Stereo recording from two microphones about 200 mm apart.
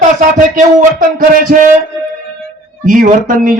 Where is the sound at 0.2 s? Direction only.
40° right (ahead or behind).